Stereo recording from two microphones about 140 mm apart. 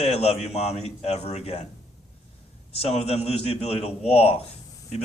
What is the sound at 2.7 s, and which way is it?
Speech, 50° left (ahead or behind).